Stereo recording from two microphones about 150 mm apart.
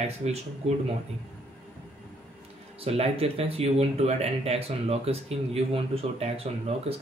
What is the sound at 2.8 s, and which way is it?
Speech, 40° right (ahead or behind).